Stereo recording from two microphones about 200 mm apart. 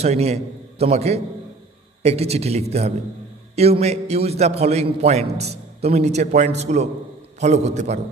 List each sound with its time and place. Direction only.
0.0 s a man's voice: 30° right (ahead or behind)